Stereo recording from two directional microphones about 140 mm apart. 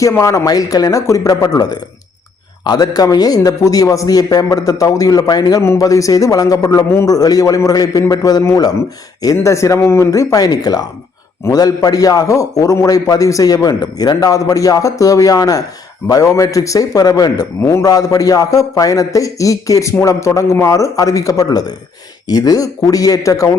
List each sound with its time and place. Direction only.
0.0 s a man's voice: 20° left (ahead or behind)